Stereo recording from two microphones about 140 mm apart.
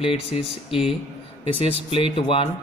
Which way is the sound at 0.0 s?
45° left (ahead or behind).